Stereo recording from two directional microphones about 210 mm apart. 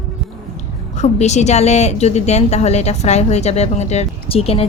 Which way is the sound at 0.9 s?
30° left (ahead or behind).